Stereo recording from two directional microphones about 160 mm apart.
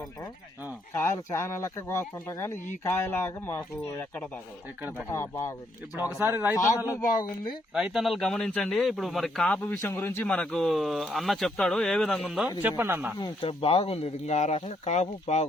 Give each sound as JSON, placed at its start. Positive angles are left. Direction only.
{"t": 0.9, "sound": "speech", "side_deg": 15}
{"t": 5.0, "sound": "speech", "side_deg": 20}
{"t": 6.0, "sound": "speech", "side_deg": -10}
{"t": 7.7, "sound": "speech", "side_deg": -5}
{"t": 13.1, "sound": "speech", "side_deg": 30}